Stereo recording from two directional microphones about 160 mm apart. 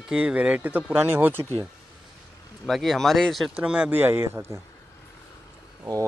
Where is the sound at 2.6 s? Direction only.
Centre (ahead or behind); by 4.6 s 15° right (ahead or behind).